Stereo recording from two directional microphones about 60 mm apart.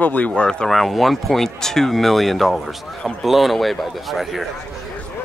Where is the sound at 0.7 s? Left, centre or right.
Centre.